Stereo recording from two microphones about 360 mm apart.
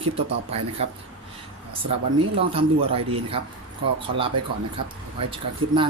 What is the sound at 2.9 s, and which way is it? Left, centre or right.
Speech, centre.